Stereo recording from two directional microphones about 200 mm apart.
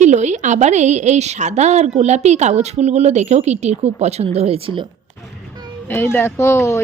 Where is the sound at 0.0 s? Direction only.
35° right (ahead or behind).